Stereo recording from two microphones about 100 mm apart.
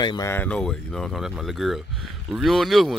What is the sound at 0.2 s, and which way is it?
Speech, 25° left (ahead or behind).